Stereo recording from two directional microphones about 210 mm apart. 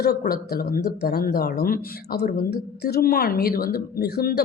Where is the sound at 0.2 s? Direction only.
45° left (ahead or behind).